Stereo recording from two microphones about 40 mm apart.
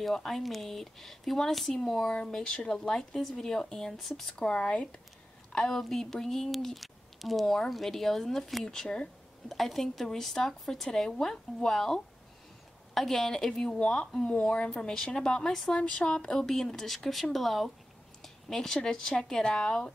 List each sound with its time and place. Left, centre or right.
0.0 s speech: centre
1.7 s speech: centre
4.5 s speech: left; by 6.5 s centre
6.5 s speech: centre
8.6 s speech: left
9.5 s speech: centre
15.8 s speech: left; by 17.6 s centre
18.2 s a sound: centre
18.9 s speech: centre